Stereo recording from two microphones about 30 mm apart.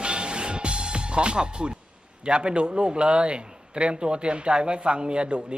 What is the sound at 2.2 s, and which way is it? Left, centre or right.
A man's voice, right.